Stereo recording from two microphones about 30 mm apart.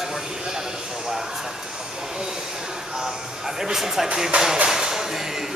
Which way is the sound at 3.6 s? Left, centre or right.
Centre.